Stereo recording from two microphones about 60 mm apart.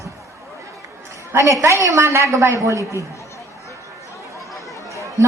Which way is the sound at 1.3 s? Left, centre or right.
Right.